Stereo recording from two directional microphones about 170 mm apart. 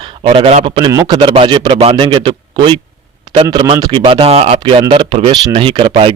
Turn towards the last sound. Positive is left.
turn(degrees=-35)  # may be behind; listen again after turning